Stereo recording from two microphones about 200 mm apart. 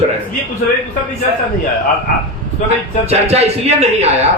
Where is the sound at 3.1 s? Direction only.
30° right (ahead or behind).